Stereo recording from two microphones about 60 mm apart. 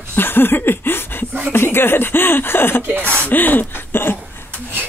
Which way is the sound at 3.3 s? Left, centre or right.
Left.